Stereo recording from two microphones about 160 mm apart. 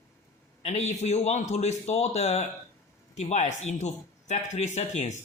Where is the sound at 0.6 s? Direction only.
45° left (ahead or behind).